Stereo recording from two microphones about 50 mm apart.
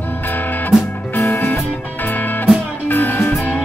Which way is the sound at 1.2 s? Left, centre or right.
Left.